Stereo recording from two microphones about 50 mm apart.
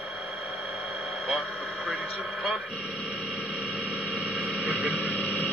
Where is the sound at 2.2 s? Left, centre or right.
Centre.